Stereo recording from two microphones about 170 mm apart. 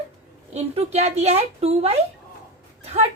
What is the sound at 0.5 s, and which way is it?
A woman's voice, 40° right (ahead or behind).